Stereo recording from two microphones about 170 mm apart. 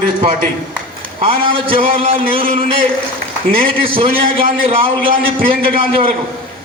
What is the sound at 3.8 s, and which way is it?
A man's voice, 35° right (ahead or behind).